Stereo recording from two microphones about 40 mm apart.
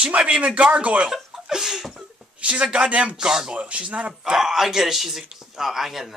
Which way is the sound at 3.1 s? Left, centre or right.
Centre.